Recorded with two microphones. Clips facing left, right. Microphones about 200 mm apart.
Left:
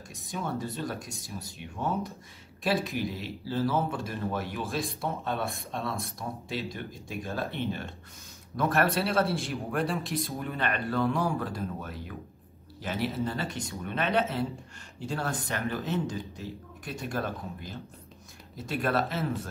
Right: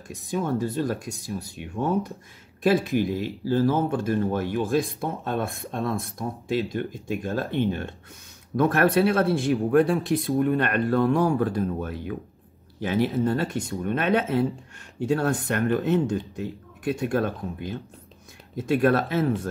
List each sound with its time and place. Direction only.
0.1 s speech: 55° right (ahead or behind)
8.5 s speech: 55° right (ahead or behind)
18.8 s speech: 50° right (ahead or behind)